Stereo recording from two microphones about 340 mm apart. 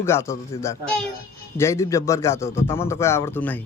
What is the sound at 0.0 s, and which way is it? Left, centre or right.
A man's voice, centre.